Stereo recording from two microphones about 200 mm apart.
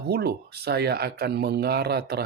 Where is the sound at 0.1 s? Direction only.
50° right (ahead or behind).